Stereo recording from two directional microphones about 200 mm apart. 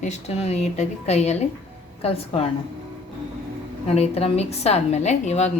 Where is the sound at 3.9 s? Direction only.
30° left (ahead or behind).